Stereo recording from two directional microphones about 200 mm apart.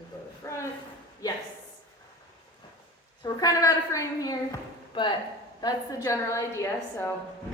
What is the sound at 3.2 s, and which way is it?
A woman's voice, 20° left (ahead or behind).